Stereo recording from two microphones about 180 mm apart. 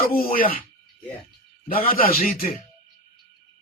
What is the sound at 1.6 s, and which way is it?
Speech, 55° left (ahead or behind).